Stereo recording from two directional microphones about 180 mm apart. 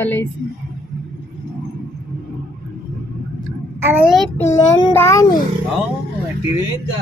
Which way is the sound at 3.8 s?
10° right (ahead or behind).